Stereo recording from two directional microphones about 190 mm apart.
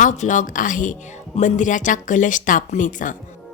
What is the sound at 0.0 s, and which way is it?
A woman's voice, 40° left (ahead or behind).